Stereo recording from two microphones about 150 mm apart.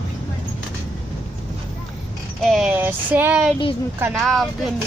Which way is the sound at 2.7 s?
10° right (ahead or behind).